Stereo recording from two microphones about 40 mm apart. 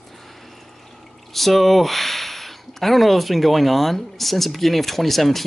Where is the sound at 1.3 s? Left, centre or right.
Centre.